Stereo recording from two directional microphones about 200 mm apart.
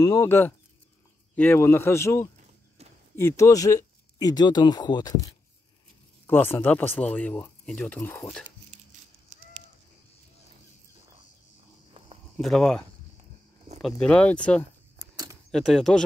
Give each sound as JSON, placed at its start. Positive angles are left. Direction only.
{"t": 0.0, "sound": "speech", "side_deg": 15}
{"t": 2.8, "sound": "a sound", "side_deg": -30}
{"t": 3.2, "sound": "speech", "side_deg": 15}
{"t": 12.4, "sound": "speech", "side_deg": 0}